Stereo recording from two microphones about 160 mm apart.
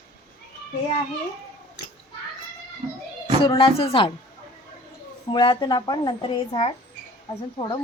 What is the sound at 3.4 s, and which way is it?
Speech, 35° left (ahead or behind).